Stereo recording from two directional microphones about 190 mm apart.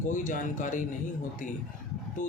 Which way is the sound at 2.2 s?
45° left (ahead or behind).